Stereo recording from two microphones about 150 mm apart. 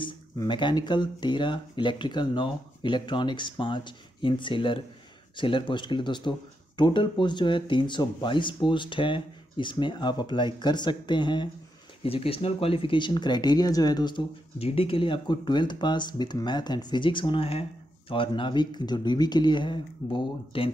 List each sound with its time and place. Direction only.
0.0 s speech: 30° left (ahead or behind)
12.0 s speech: 40° left (ahead or behind)